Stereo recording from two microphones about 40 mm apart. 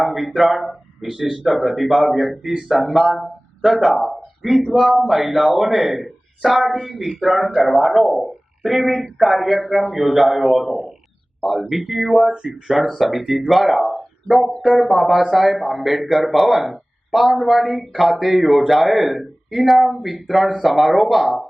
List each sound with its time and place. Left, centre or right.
0.0 s a man's voice: centre
3.6 s speech: centre
3.9 s a man's voice: centre
12.3 s speech: right
12.6 s a man's voice: centre
13.9 s a sound: centre
14.8 s a man's voice: centre